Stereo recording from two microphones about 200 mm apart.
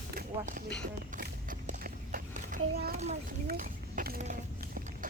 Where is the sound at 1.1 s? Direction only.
40° right (ahead or behind).